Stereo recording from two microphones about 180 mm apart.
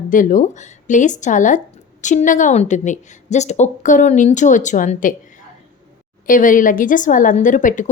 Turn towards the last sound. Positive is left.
turn(degrees=45)  # may be behind; listen again after turning